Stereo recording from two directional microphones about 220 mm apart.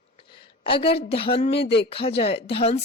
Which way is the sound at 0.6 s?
25° left (ahead or behind).